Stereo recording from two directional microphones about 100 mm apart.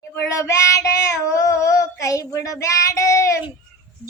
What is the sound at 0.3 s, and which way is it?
Child singing, 30° left (ahead or behind).